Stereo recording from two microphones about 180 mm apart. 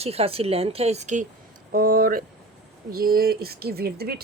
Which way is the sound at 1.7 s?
55° right (ahead or behind).